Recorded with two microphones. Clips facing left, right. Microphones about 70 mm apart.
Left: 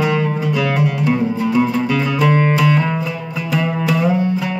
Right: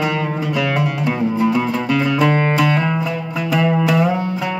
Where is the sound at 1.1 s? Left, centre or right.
Centre.